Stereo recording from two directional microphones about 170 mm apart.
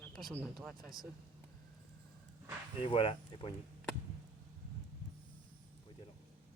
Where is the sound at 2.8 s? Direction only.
30° left (ahead or behind).